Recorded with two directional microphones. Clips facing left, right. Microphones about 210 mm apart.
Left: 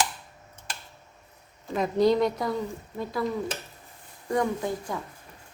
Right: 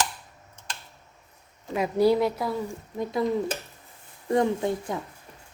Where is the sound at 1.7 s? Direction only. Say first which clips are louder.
Right 1 dB; 10° right (ahead or behind).